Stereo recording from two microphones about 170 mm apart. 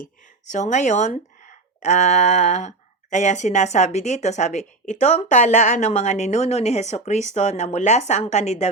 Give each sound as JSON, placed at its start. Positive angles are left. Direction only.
{"t": 0.5, "sound": "speech", "side_deg": 45}